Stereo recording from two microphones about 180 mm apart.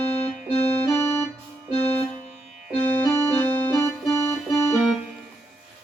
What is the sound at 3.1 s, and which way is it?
Keyboard, 10° left (ahead or behind).